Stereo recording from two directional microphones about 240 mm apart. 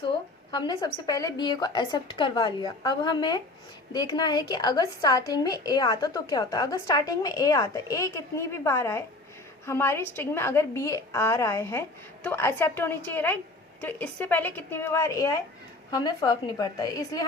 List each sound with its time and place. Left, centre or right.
0.5 s a woman's voice: centre